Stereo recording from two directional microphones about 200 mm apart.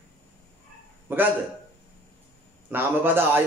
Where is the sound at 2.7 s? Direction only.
10° right (ahead or behind).